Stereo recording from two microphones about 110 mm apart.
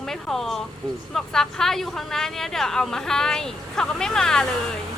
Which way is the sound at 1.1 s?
5° left (ahead or behind).